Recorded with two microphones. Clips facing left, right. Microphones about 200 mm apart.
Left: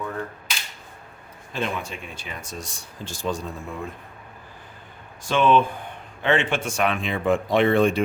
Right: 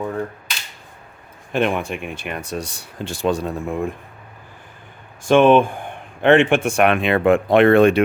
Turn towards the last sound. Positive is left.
turn(degrees=-65)  # may be behind; listen again after turning